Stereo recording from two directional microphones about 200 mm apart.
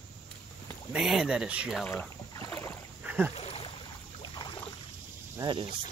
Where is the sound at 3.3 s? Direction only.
30° left (ahead or behind).